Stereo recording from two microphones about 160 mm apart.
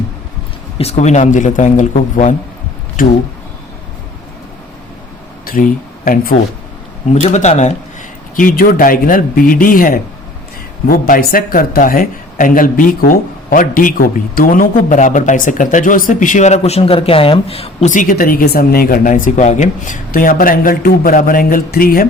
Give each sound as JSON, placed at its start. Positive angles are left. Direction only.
{"t": 0.8, "sound": "a man's voice", "side_deg": 45}
{"t": 5.5, "sound": "speech", "side_deg": 60}
{"t": 7.3, "sound": "a man's voice", "side_deg": 45}
{"t": 8.4, "sound": "speech", "side_deg": 60}